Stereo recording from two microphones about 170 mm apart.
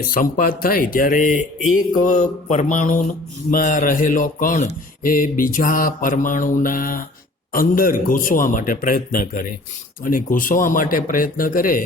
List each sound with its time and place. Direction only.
0.1 s a man's voice: 55° left (ahead or behind)